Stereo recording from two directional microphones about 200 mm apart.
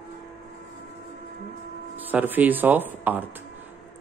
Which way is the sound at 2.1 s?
10° right (ahead or behind).